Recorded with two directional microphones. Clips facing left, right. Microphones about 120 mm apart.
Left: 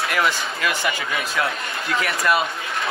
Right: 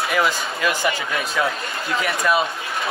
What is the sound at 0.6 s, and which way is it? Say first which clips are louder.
Speech: right 4 dB; 15° right (ahead or behind).